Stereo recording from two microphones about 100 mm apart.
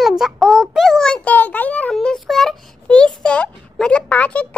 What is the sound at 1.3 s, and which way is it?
Speech, 15° left (ahead or behind).